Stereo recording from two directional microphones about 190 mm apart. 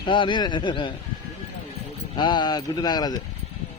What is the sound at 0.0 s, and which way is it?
Speech, 25° left (ahead or behind).